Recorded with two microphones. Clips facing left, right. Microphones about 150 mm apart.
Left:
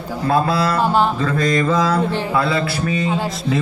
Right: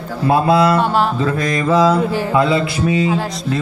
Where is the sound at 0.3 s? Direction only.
15° right (ahead or behind).